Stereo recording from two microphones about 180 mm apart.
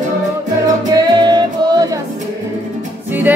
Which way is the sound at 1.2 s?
25° right (ahead or behind).